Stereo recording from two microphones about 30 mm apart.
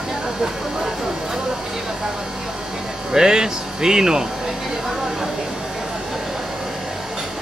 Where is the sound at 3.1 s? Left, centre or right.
Centre.